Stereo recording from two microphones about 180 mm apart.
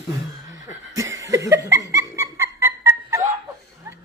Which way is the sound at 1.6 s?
15° right (ahead or behind).